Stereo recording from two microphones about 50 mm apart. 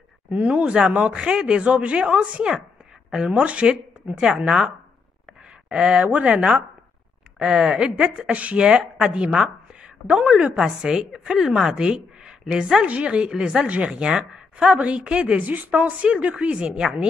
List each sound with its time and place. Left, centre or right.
0.3 s speech: right
8.6 s a woman's voice: centre